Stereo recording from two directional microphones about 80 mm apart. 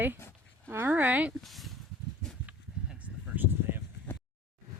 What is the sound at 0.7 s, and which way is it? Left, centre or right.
Speech, right.